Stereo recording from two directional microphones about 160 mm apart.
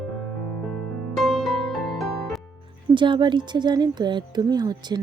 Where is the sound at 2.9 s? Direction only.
30° right (ahead or behind).